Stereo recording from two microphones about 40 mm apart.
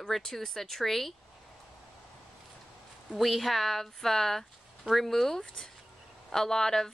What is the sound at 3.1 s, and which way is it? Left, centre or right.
A woman's voice, centre.